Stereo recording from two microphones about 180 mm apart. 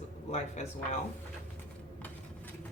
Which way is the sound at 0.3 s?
40° left (ahead or behind).